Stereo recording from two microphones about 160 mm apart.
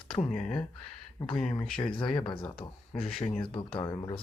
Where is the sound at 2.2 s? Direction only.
30° left (ahead or behind).